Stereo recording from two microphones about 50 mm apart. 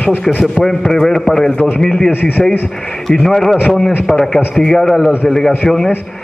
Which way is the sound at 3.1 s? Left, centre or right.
Centre.